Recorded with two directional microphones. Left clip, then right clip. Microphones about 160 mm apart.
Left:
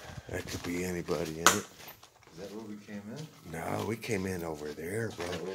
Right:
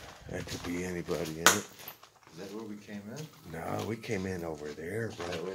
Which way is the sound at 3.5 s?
25° left (ahead or behind).